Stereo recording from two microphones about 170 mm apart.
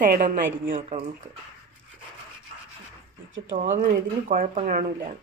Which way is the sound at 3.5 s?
50° right (ahead or behind).